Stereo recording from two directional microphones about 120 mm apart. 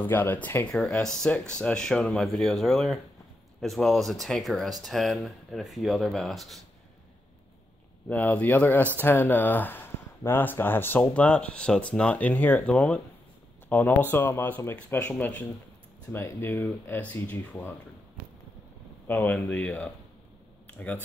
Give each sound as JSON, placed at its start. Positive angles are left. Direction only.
{"t": 0.0, "sound": "speech", "side_deg": 15}
{"t": 8.1, "sound": "speech", "side_deg": 15}
{"t": 19.0, "sound": "speech", "side_deg": 15}